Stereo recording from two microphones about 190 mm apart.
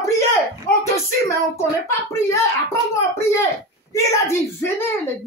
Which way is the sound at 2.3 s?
15° left (ahead or behind).